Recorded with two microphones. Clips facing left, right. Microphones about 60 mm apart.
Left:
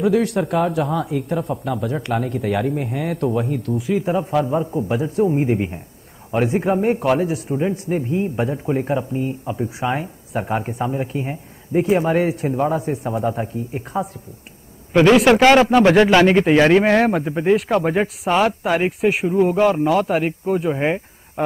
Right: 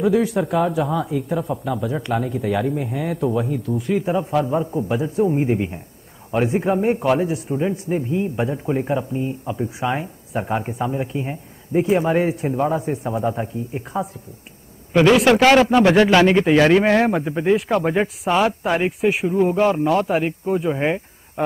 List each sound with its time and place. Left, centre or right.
0.0 s a man's voice: centre
3.4 s speech: left
3.7 s a man's voice: centre
16.8 s a man's voice: centre